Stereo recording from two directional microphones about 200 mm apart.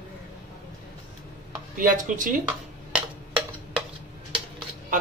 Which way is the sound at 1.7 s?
40° right (ahead or behind).